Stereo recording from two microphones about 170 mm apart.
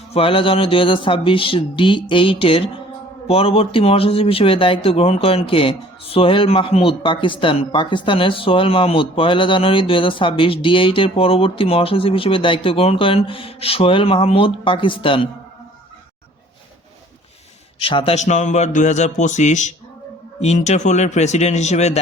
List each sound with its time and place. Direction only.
0.1 s speech: 35° left (ahead or behind)
17.7 s speech: 35° left (ahead or behind)